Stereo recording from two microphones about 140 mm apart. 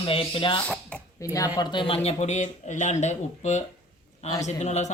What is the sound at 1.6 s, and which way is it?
Speech, 35° left (ahead or behind).